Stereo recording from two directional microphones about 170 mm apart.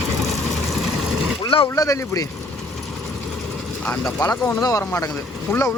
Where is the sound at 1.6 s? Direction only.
20° left (ahead or behind).